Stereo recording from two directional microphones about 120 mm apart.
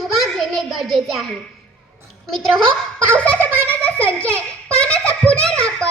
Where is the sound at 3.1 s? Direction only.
10° left (ahead or behind).